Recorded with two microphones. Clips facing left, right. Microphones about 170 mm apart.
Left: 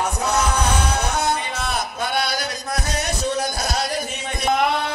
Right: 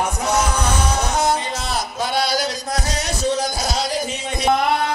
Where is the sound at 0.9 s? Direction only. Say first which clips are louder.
Right 2 dB; 60° left (ahead or behind).